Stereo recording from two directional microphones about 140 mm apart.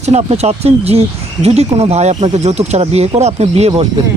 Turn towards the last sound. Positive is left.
turn(degrees=-45)  # may be behind; listen again after turning